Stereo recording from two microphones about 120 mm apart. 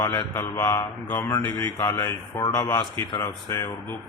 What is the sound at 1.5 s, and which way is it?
A man's voice, 30° left (ahead or behind).